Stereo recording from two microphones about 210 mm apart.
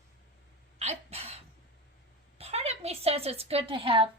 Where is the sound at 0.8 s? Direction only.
30° right (ahead or behind).